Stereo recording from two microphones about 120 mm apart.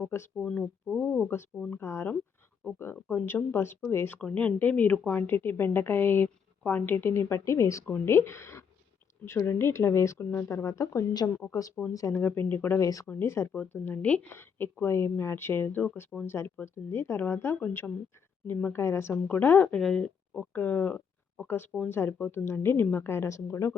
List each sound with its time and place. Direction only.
0.3 s speech: 5° left (ahead or behind)
12.8 s speech: 30° left (ahead or behind)
13.5 s speech: 10° left (ahead or behind)